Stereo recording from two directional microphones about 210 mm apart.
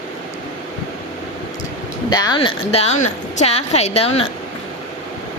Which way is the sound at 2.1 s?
20° left (ahead or behind).